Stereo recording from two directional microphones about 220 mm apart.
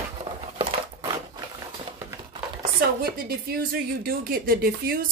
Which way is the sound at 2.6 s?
45° right (ahead or behind).